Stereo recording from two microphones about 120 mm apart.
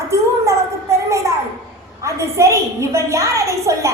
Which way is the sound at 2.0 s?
25° right (ahead or behind).